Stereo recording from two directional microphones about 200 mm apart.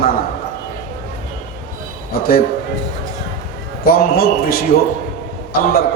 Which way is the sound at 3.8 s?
45° left (ahead or behind).